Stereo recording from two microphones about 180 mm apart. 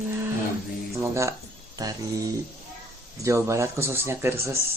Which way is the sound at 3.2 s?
15° right (ahead or behind).